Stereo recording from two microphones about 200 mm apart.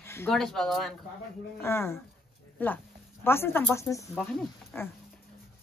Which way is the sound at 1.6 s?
10° left (ahead or behind).